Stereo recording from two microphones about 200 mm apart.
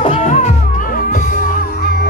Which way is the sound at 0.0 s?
35° left (ahead or behind).